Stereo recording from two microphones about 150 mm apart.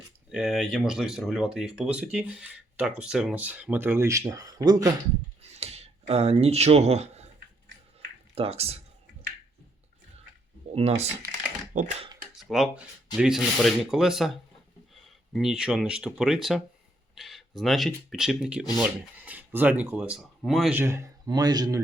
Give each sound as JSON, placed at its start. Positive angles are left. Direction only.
{"t": 0.3, "sound": "speech", "side_deg": -5}
{"t": 5.4, "sound": "a sound", "side_deg": -45}
{"t": 8.4, "sound": "speech", "side_deg": -40}
{"t": 10.8, "sound": "speech", "side_deg": -45}
{"t": 11.7, "sound": "speech", "side_deg": -60}
{"t": 12.4, "sound": "speech", "side_deg": 0}
{"t": 20.7, "sound": "a man's voice", "side_deg": -20}